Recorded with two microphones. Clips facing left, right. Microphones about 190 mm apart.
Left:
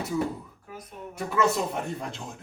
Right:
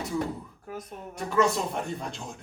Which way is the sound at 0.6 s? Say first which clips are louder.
Right 5 dB; 45° right (ahead or behind).